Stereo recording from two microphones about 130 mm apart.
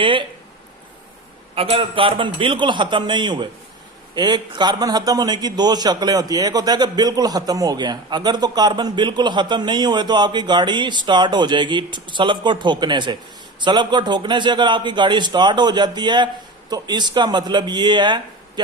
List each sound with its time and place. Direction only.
0.0 s a man's voice: 40° right (ahead or behind)
1.5 s a man's voice: 45° right (ahead or behind)